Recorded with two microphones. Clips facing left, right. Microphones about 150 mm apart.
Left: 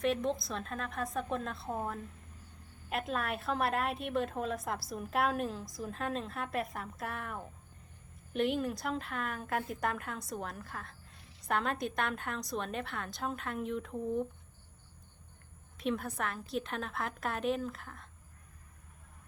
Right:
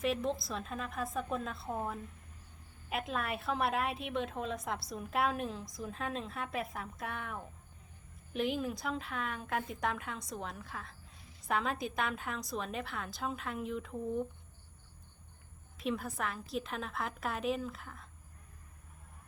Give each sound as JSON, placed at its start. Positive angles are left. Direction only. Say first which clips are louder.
{"t": 0.0, "sound": "a woman's voice", "louder": "left 2 dB", "side_deg": 0}
{"t": 15.8, "sound": "a woman's voice", "louder": "left 1 dB", "side_deg": 0}